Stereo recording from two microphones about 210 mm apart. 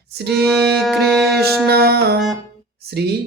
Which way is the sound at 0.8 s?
Centre (ahead or behind).